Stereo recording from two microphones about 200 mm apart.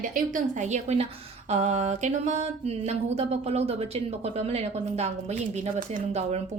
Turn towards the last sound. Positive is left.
turn(degrees=-35)  # may be behind; listen again after turning